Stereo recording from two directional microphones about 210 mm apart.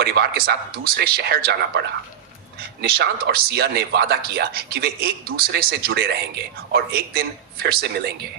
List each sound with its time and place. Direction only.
0.0 s speech: 50° right (ahead or behind)